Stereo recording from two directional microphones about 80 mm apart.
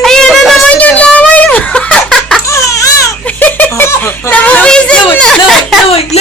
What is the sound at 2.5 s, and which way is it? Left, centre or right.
Baby cry, left.